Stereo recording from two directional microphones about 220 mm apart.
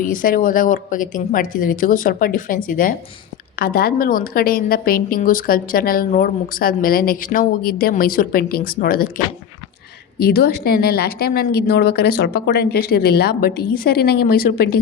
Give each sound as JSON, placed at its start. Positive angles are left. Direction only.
{"t": 0.0, "sound": "a woman's voice", "side_deg": 40}
{"t": 10.2, "sound": "a woman's voice", "side_deg": 45}